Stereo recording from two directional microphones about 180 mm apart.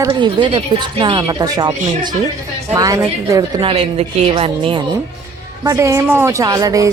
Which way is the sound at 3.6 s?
30° right (ahead or behind).